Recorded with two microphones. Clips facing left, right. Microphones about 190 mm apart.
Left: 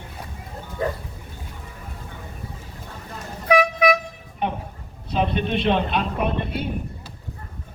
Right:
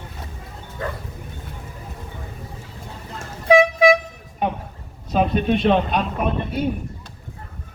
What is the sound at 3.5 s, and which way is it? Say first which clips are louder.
Vehicle: right 4 dB; 25° right (ahead or behind).